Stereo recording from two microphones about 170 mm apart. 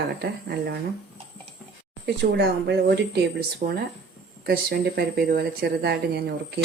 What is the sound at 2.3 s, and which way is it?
A woman's voice, 80° right.